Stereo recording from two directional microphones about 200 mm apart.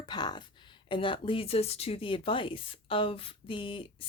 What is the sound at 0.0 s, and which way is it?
Speech, 20° left (ahead or behind).